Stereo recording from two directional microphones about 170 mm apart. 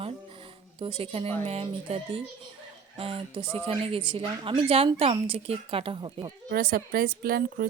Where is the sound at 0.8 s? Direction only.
30° right (ahead or behind).